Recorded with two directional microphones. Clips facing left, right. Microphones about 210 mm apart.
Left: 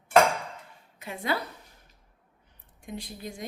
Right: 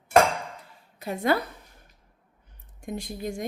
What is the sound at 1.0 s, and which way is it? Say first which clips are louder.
Speech: right 6 dB; 45° right (ahead or behind).